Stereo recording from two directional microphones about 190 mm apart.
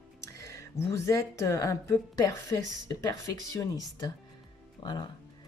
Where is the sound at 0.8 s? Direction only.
15° left (ahead or behind).